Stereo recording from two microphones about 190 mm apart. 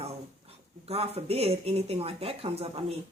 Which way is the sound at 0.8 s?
30° right (ahead or behind).